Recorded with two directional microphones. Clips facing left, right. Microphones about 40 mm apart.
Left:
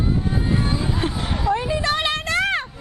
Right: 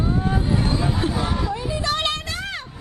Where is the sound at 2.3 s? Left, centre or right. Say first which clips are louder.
Left 9 dB; left.